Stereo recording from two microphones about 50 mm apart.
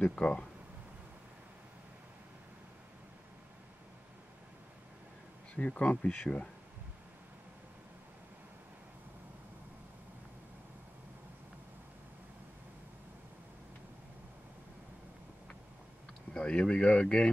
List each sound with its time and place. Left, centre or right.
0.0 s speech: centre
5.7 s speech: left
16.3 s speech: left